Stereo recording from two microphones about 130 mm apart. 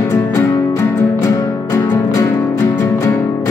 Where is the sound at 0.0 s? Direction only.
25° left (ahead or behind).